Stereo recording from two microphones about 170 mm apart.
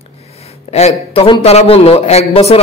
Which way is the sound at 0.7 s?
40° left (ahead or behind).